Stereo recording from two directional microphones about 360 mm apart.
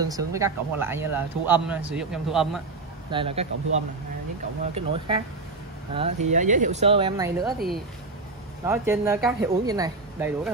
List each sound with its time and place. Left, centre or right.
0.1 s speech: centre
3.1 s a woman's voice: centre
4.7 s a woman's voice: centre